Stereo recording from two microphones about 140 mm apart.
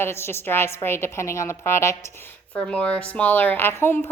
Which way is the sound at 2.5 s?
10° left (ahead or behind).